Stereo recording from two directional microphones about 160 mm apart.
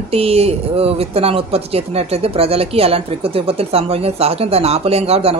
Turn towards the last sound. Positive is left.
turn(degrees=-40)  # may be behind; listen again after turning